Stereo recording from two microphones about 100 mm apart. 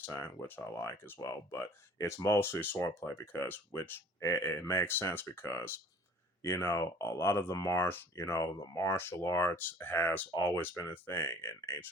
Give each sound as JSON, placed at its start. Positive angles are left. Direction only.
{"t": 0.0, "sound": "speech", "side_deg": 20}
{"t": 4.2, "sound": "speech", "side_deg": 30}